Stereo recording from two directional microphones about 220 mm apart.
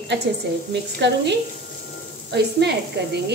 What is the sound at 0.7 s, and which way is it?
A woman's voice, 50° right (ahead or behind).